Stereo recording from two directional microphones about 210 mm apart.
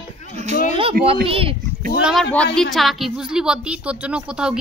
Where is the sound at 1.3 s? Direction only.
25° right (ahead or behind).